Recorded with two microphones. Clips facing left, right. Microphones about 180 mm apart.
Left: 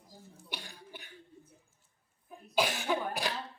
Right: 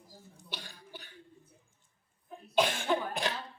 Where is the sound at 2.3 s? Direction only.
5° left (ahead or behind).